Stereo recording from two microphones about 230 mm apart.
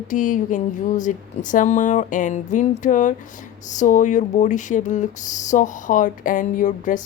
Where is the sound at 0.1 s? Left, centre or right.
Left.